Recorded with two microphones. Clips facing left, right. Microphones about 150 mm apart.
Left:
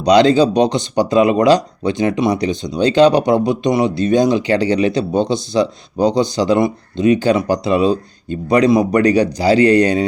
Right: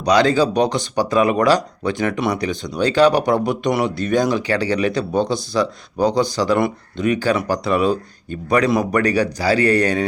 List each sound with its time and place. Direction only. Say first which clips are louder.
0.0 s speech: left 5 dB; 20° left (ahead or behind)